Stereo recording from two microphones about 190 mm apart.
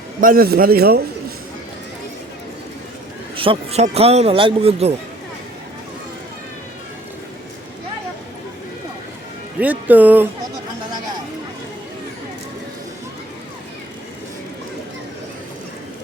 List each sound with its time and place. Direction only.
0.2 s a man's voice: 50° right (ahead or behind)
3.3 s a man's voice: 30° right (ahead or behind)
9.6 s speech: 10° right (ahead or behind)